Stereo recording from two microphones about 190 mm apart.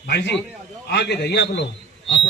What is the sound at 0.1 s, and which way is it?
A man's voice, 65° left (ahead or behind).